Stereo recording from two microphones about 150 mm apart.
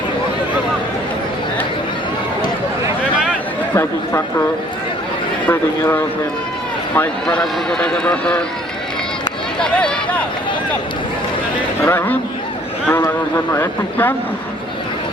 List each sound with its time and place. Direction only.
3.8 s speech: 15° left (ahead or behind)
5.5 s speech: 15° left (ahead or behind)
9.6 s speech: 5° left (ahead or behind)
11.8 s speech: 15° left (ahead or behind)